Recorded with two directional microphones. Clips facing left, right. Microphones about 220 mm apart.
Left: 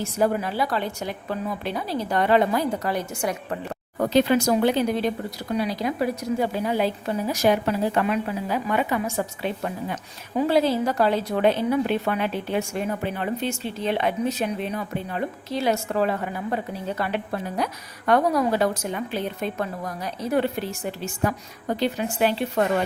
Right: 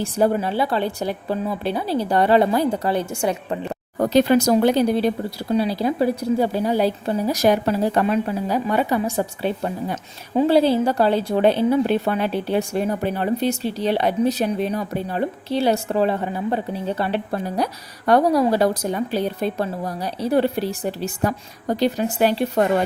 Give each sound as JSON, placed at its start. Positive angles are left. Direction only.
{"t": 0.0, "sound": "speech", "side_deg": -30}
{"t": 3.9, "sound": "speech", "side_deg": -40}